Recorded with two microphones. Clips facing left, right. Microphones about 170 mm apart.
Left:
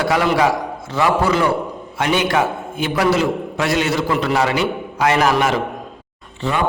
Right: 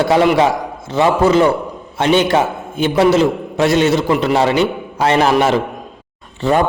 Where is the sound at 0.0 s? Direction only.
25° right (ahead or behind).